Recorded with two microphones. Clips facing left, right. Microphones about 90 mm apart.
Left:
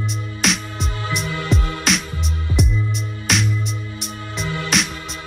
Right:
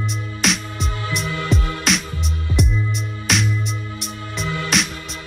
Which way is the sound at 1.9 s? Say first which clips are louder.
Even; centre (ahead or behind).